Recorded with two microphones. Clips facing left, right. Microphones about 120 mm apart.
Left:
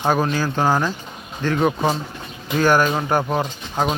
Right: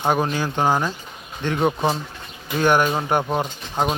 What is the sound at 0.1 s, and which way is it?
Speech, 20° right (ahead or behind).